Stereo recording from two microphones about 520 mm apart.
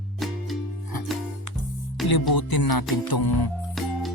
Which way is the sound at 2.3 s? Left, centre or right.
Left.